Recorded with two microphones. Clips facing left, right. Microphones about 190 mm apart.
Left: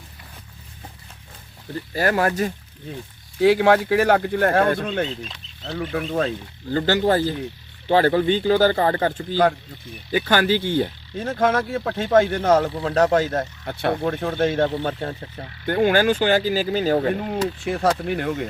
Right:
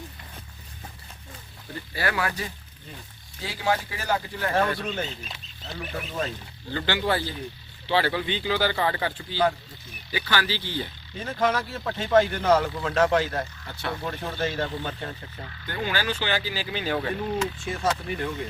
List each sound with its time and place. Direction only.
1.9 s speech: 45° left (ahead or behind)
3.4 s speech: 60° left (ahead or behind)
5.6 s speech: 85° left; by 6.3 s 70° left (ahead or behind)
6.7 s speech: 40° left (ahead or behind)
13.7 s speech: 55° left (ahead or behind); by 17.5 s 40° left (ahead or behind)
18.0 s speech: 70° left (ahead or behind)